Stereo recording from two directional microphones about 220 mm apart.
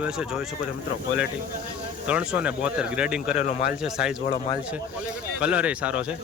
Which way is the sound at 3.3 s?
35° left (ahead or behind).